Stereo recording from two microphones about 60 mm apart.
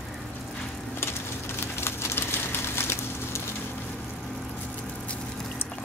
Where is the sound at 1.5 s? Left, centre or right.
Left.